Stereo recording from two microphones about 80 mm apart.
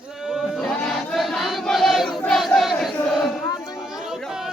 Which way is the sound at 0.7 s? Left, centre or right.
Centre.